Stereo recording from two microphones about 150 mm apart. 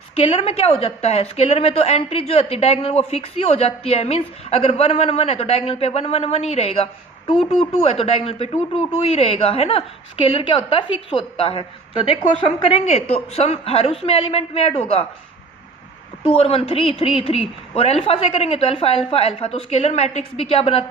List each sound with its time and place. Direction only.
0.2 s a woman's voice: 45° left (ahead or behind)
16.2 s a woman's voice: 40° left (ahead or behind)